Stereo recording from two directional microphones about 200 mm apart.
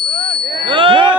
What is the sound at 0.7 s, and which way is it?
Ding, 25° right (ahead or behind).